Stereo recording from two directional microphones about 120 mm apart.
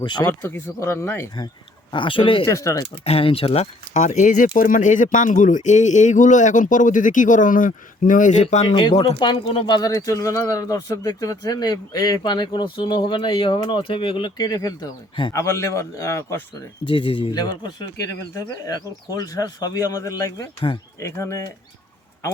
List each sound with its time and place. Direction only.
0.0 s speech: 40° left (ahead or behind)
0.3 s speech: 20° left (ahead or behind)
1.9 s speech: 45° left (ahead or behind)
2.5 s speech: 25° left (ahead or behind)
3.0 s speech: 55° left (ahead or behind); by 8.6 s 85° left
8.6 s speech: 40° left (ahead or behind)
15.3 s speech: 25° left (ahead or behind)
16.8 s speech: 45° left (ahead or behind)
17.3 s speech: 35° left (ahead or behind)